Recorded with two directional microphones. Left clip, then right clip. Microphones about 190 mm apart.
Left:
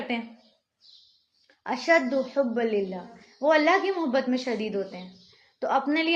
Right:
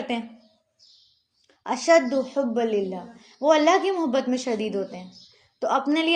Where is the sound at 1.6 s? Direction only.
35° right (ahead or behind).